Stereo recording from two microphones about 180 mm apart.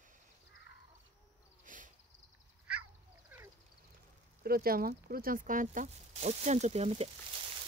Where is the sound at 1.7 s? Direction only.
45° right (ahead or behind).